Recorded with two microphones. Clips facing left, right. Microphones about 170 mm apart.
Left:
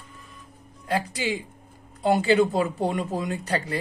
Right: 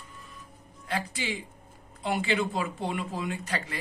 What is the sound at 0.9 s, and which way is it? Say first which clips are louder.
Speech: left 6 dB; 40° left (ahead or behind).